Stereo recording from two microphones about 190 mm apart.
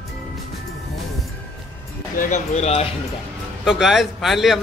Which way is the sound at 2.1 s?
35° left (ahead or behind).